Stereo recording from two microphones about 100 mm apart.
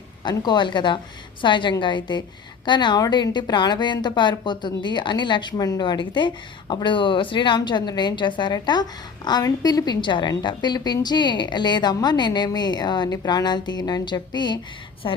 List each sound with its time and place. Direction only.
0.3 s a woman's voice: 50° left (ahead or behind)